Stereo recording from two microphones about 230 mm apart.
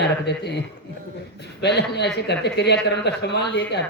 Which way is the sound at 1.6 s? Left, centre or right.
Left.